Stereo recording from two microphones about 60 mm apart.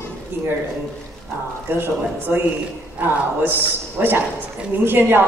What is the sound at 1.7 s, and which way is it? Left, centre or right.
A woman's voice, right.